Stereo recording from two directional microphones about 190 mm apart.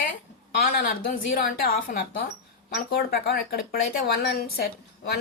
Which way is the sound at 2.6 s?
55° left (ahead or behind).